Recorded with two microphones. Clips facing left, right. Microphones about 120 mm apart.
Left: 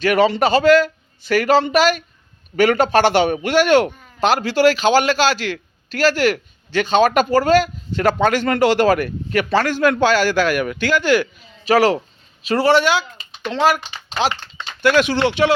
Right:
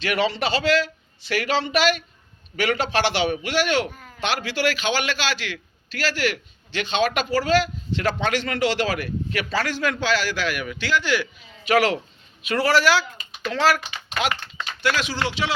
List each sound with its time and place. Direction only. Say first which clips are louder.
0.0 s speech: left 8 dB; 45° left (ahead or behind); by 13.1 s 20° left (ahead or behind)
13.1 s typing: left 4 dB; 25° left (ahead or behind)
14.2 s speech: left 4 dB; 30° left (ahead or behind)
14.8 s speech: left 9 dB; 55° left (ahead or behind)